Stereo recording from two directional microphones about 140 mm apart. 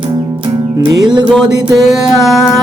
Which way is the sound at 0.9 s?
35° right (ahead or behind).